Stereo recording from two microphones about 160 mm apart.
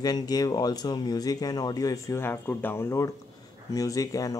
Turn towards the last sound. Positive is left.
turn(degrees=20)  # may be behind; listen again after turning